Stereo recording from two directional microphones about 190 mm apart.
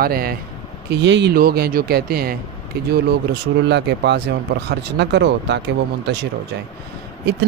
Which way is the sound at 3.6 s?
65° right (ahead or behind).